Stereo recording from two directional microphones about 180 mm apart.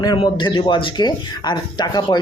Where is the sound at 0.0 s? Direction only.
25° left (ahead or behind).